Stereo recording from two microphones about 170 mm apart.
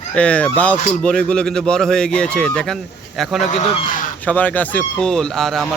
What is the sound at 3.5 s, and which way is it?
Speech, 50° left (ahead or behind).